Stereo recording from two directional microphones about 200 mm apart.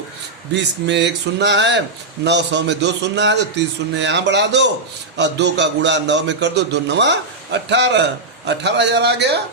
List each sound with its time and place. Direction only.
0.5 s a man's voice: 60° right (ahead or behind)